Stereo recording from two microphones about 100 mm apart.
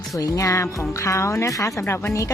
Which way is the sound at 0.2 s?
35° left (ahead or behind).